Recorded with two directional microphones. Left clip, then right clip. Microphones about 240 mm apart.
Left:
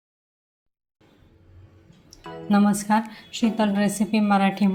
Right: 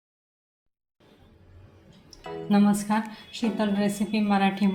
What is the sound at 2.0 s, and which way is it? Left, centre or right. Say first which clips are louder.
A woman's voice: left 2 dB; left.